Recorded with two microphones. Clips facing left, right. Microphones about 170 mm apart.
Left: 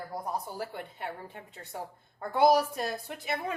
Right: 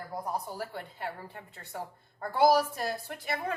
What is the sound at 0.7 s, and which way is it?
Speech, 20° left (ahead or behind).